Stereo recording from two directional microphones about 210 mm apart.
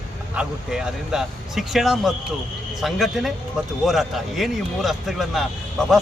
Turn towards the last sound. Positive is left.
turn(degrees=0)  # may be behind; listen again after turning